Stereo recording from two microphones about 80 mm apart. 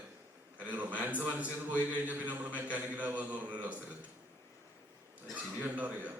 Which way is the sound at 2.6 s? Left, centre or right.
Centre.